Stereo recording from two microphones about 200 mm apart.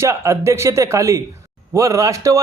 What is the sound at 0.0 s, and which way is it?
A man's voice, 15° right (ahead or behind).